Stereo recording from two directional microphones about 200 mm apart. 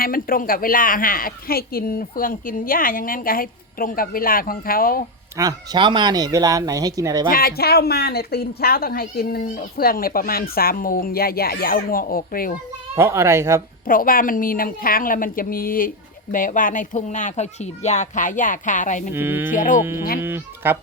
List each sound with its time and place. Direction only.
0.0 s speech: 45° left (ahead or behind)
5.4 s speech: 20° right (ahead or behind)
7.3 s speech: 50° left (ahead or behind)
13.0 s speech: 15° right (ahead or behind)
13.8 s speech: 45° left (ahead or behind)
19.1 s speech: 10° right (ahead or behind)
19.5 s speech: 40° left (ahead or behind)
19.8 s speech: 10° right (ahead or behind)